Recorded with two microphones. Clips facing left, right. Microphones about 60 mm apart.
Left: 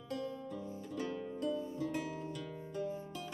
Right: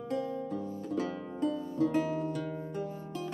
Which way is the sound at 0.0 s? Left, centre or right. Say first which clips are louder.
Right 7 dB; right.